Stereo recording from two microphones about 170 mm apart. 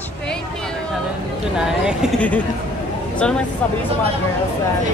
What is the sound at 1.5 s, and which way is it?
Speech, 5° right (ahead or behind).